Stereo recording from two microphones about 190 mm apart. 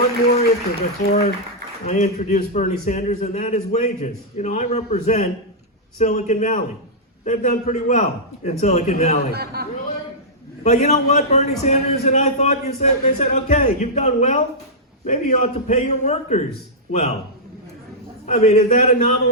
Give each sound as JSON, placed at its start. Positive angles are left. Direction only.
{"t": 0.3, "sound": "a man's voice", "side_deg": 35}
{"t": 9.3, "sound": "a man's voice", "side_deg": -55}
{"t": 10.6, "sound": "a man's voice", "side_deg": 35}
{"t": 18.3, "sound": "a man's voice", "side_deg": 35}